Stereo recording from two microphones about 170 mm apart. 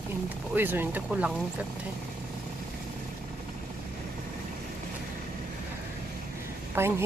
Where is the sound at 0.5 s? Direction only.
10° right (ahead or behind).